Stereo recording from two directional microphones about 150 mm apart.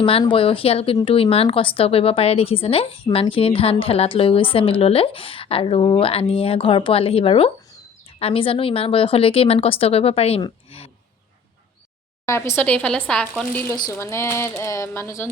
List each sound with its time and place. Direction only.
0.0 s a woman's voice: 35° left (ahead or behind)
12.2 s speech: 15° left (ahead or behind)